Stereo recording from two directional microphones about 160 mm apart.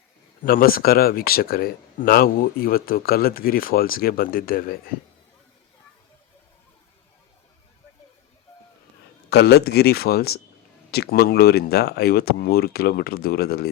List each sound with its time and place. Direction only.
0.4 s speech: 65° left (ahead or behind)
9.3 s speech: 90° left